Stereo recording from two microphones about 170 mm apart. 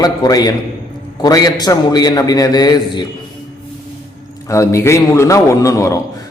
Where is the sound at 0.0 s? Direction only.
20° left (ahead or behind).